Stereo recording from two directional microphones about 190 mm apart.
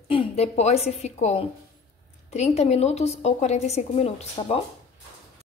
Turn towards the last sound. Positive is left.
turn(degrees=30)  # may be behind; listen again after turning